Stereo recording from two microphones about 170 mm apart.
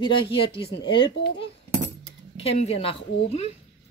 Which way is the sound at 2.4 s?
35° left (ahead or behind).